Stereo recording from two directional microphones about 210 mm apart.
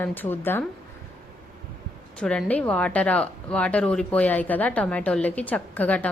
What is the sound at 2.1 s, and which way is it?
Speech, 5° left (ahead or behind).